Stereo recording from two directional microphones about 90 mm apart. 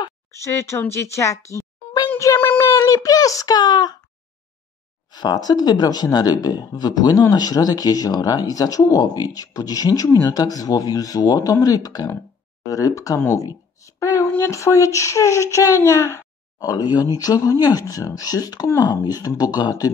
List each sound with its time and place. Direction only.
0.5 s a child's voice: 30° left (ahead or behind); by 4.0 s 50° left (ahead or behind)
5.1 s a child's voice: 50° left (ahead or behind)